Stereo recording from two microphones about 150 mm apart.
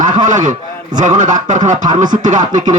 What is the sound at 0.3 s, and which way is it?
Speech, 55° right (ahead or behind).